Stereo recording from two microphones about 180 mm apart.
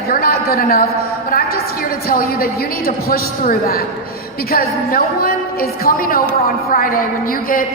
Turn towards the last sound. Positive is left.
turn(degrees=50)  # may be behind; listen again after turning